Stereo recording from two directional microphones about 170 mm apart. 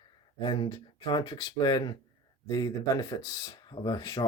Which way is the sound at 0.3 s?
30° left (ahead or behind).